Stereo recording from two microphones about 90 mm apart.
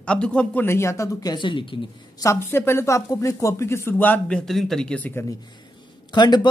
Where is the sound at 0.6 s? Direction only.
30° left (ahead or behind).